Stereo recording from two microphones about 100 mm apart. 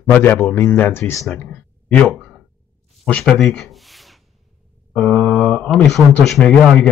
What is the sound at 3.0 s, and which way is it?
Speech, 15° left (ahead or behind).